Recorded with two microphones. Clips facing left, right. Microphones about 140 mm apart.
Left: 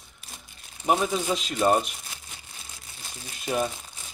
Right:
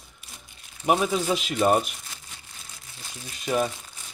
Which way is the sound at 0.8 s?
5° right (ahead or behind).